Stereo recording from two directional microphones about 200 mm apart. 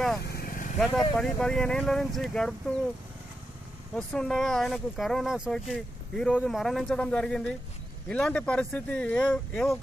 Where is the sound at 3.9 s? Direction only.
5° left (ahead or behind).